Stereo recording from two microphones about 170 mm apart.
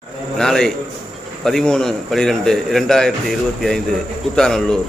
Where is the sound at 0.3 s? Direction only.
5° left (ahead or behind).